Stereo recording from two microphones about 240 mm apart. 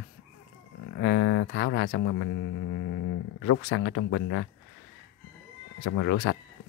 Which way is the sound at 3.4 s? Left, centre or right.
Left.